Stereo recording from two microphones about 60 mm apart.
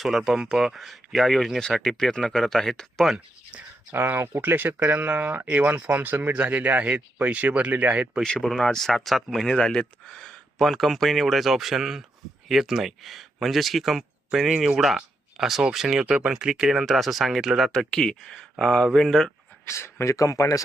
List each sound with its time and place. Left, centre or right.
0.0 s speech: centre
3.9 s speech: right
8.2 s speech: centre
17.9 s speech: centre
19.6 s speech: left